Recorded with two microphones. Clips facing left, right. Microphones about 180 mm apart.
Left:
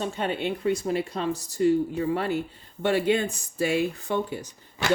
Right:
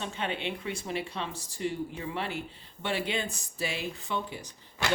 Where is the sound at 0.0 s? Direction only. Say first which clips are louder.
Left 6 dB; 45° left (ahead or behind).